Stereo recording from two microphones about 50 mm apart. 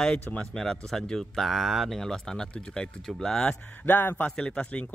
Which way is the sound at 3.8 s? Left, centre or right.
Left.